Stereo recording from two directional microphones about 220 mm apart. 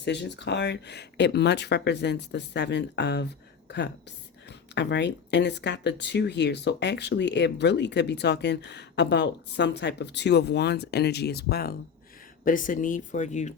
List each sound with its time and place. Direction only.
0.0 s speech: 50° left (ahead or behind)
4.4 s speech: 50° left (ahead or behind); by 13.5 s 35° left (ahead or behind)